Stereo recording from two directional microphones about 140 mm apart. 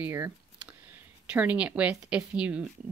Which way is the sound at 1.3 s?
10° right (ahead or behind).